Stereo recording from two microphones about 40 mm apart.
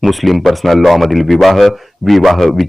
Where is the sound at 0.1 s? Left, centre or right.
Centre.